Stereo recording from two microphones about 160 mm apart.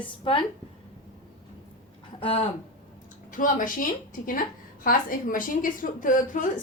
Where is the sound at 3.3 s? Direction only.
60° left (ahead or behind).